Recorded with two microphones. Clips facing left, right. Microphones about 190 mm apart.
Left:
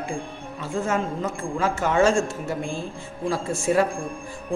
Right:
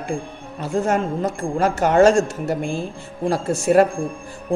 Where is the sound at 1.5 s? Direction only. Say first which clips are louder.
Right 6 dB; 65° right (ahead or behind).